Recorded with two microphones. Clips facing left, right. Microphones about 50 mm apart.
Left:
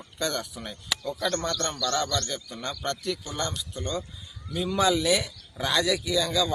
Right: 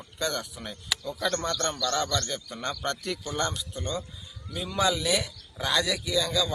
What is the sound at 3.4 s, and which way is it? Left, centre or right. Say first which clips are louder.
Speech: right 1 dB; centre.